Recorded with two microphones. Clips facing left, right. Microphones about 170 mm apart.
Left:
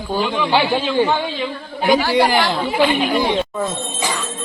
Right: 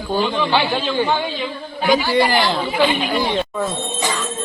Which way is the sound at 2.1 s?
15° left (ahead or behind).